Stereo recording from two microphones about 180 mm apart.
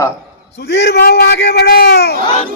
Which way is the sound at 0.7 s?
65° left (ahead or behind).